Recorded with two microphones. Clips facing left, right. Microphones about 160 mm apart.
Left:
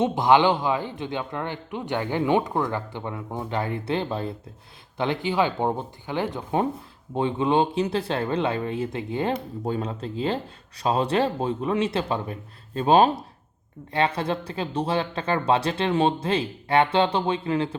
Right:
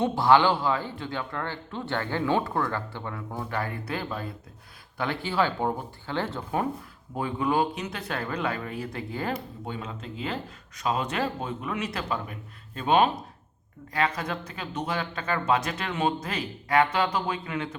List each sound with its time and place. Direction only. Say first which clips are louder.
0.0 s a man's voice: left 2 dB; 20° left (ahead or behind)
9.6 s a man's voice: left 10 dB; 35° left (ahead or behind)